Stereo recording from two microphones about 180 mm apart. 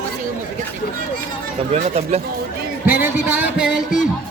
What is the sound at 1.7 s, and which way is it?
Speech, 35° right (ahead or behind).